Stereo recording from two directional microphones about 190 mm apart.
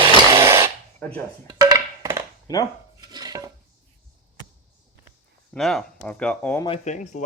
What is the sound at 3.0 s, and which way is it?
Dishes, 20° right (ahead or behind).